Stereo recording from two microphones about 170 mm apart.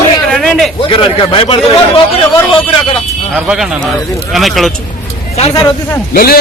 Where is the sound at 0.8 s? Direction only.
35° left (ahead or behind).